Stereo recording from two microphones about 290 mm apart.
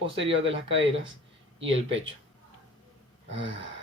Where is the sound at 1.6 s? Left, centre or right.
Right.